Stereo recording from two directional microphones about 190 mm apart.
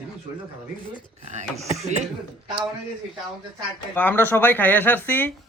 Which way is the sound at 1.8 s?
35° right (ahead or behind).